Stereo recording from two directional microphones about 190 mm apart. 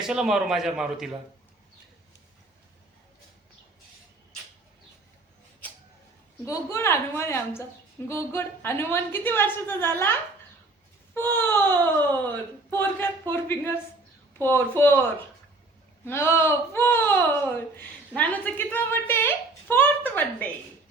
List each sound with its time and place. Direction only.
0.0 s a man's voice: 5° right (ahead or behind)
6.4 s a woman's voice: 15° left (ahead or behind)
12.7 s a woman's voice: 10° left (ahead or behind)
16.0 s a woman's voice: 15° left (ahead or behind)